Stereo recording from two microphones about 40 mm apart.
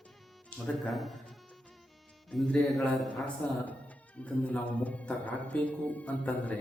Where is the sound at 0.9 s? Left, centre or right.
Centre.